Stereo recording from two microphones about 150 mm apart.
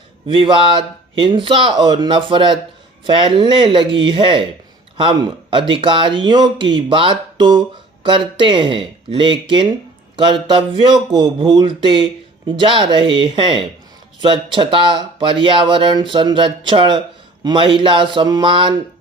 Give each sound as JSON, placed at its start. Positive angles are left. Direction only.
{"t": 0.3, "sound": "speech", "side_deg": -35}